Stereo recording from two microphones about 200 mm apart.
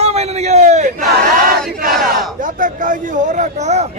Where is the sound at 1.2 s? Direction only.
45° right (ahead or behind).